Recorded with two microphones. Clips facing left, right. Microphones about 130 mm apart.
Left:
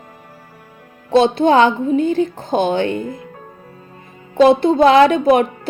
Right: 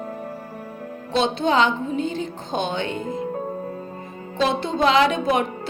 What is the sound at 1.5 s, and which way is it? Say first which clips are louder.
Speech: left 5 dB; 50° left (ahead or behind).